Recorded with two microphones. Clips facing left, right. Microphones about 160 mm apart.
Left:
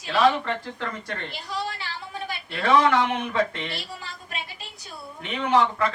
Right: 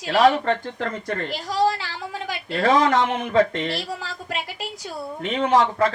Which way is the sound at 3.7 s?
90° right.